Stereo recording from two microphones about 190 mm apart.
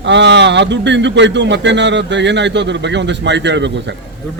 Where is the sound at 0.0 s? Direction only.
65° right (ahead or behind).